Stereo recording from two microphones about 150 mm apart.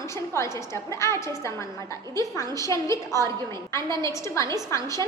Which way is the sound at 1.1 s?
20° left (ahead or behind).